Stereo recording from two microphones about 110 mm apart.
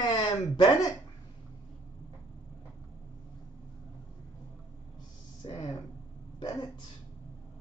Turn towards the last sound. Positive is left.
turn(degrees=40)  # may be behind; listen again after turning